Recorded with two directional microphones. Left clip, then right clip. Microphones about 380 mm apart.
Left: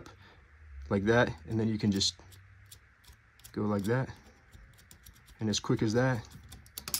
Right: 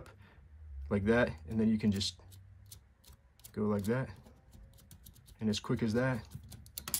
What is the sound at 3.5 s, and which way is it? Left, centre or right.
Speech, centre.